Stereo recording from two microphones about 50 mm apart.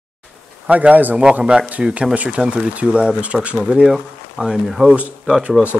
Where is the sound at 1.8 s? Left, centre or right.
Right.